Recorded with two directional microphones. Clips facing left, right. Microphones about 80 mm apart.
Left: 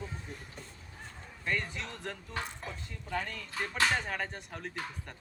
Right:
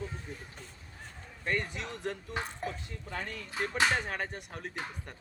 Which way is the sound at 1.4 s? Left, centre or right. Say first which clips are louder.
Right 1 dB; centre.